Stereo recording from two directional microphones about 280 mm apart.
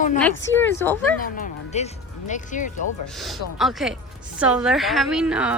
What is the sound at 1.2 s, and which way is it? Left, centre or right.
Speech, left.